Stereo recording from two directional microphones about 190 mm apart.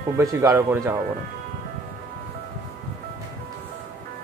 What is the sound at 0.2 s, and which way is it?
Speech, 15° right (ahead or behind).